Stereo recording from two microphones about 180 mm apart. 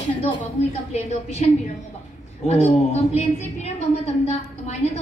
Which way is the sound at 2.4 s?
35° left (ahead or behind).